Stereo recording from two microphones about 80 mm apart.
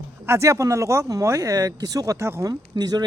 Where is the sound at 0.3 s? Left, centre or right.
Right.